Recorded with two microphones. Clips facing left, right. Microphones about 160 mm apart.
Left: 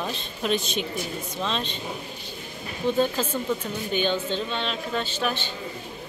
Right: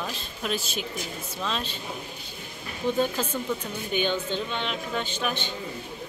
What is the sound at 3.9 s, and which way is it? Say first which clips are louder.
Speech: left 1 dB; 15° right (ahead or behind).